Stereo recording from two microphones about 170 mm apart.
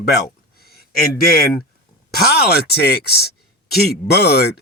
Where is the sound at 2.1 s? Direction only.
65° left (ahead or behind).